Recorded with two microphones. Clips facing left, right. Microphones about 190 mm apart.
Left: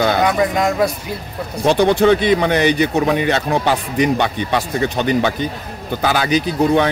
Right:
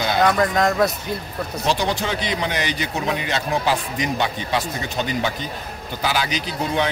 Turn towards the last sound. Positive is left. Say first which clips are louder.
# left 8 dB
turn(degrees=55)  # may be behind; listen again after turning